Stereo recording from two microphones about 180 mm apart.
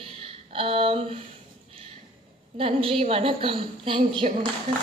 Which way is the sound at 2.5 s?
30° right (ahead or behind).